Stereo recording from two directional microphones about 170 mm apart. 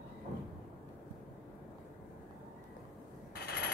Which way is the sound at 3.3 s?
70° left (ahead or behind).